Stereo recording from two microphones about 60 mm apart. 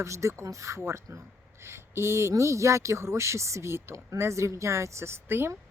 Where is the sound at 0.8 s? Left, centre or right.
Right.